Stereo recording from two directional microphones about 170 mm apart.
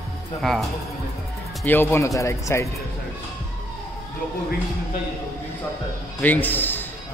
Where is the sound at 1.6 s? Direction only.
10° left (ahead or behind).